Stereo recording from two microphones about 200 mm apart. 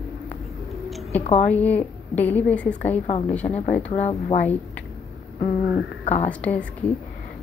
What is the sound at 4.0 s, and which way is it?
Speech, 35° left (ahead or behind).